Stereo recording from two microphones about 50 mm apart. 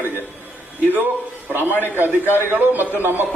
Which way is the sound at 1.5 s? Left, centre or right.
Right.